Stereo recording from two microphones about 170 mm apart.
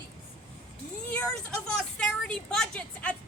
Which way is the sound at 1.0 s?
5° left (ahead or behind).